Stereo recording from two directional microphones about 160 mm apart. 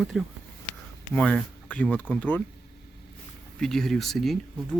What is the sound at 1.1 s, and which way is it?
Speech, 10° left (ahead or behind).